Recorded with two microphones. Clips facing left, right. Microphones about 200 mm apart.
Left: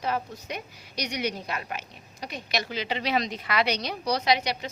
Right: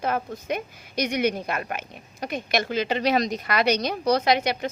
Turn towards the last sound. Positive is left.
turn(degrees=-50)  # may be behind; listen again after turning